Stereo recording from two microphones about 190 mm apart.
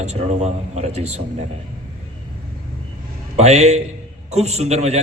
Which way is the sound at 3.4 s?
35° right (ahead or behind).